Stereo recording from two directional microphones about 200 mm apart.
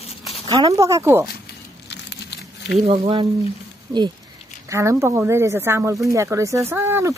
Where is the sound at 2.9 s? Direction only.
25° right (ahead or behind).